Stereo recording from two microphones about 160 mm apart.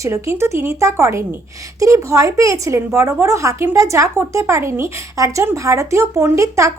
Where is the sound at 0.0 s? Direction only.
15° right (ahead or behind).